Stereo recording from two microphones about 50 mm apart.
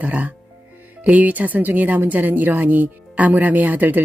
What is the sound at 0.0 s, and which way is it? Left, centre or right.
Speech, right.